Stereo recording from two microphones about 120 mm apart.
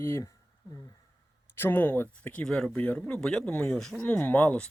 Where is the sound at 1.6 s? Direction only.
15° left (ahead or behind).